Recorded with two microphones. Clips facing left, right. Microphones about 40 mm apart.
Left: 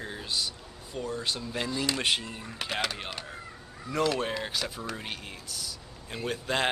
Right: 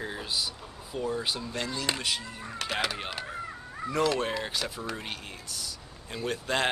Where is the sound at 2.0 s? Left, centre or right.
Left.